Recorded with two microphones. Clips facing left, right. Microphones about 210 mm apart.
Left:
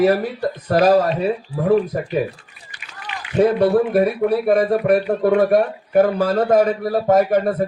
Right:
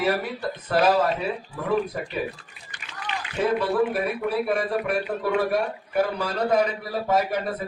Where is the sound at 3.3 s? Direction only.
40° left (ahead or behind).